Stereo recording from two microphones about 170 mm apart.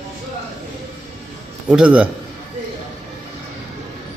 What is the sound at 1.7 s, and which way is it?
Speech, 5° right (ahead or behind).